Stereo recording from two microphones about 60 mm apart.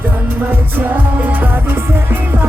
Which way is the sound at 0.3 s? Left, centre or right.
Right.